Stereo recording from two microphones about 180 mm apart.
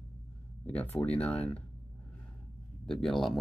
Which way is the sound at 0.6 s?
10° left (ahead or behind).